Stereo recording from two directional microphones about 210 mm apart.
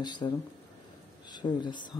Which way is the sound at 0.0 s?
20° left (ahead or behind).